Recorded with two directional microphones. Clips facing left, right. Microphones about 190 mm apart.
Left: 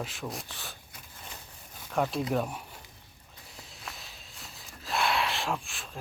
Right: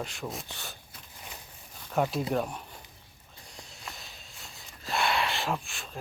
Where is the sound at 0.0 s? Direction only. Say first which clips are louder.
Even; centre (ahead or behind).